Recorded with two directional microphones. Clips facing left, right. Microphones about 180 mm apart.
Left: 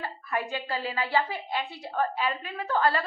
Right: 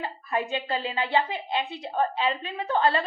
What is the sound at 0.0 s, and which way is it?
A woman's voice, 20° right (ahead or behind).